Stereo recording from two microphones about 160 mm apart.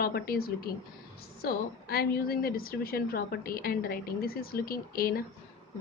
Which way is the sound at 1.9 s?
70° left (ahead or behind).